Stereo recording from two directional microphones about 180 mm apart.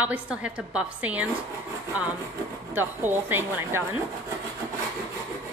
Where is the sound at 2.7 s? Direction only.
10° right (ahead or behind).